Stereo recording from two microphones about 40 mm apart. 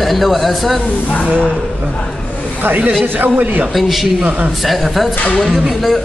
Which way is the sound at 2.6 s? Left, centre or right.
Right.